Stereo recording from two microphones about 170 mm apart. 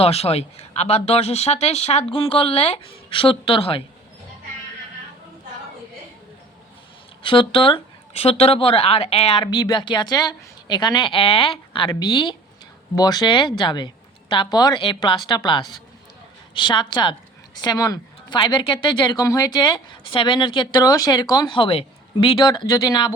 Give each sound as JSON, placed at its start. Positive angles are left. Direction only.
{"t": 0.0, "sound": "speech", "side_deg": 35}
{"t": 7.2, "sound": "a woman's voice", "side_deg": 30}